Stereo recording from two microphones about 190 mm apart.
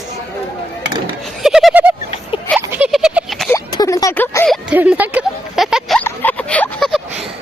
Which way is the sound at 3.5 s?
20° left (ahead or behind).